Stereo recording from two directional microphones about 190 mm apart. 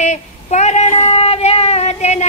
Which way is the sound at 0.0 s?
35° left (ahead or behind).